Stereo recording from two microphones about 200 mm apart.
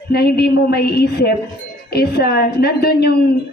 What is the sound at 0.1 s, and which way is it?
A woman's voice, 50° left (ahead or behind).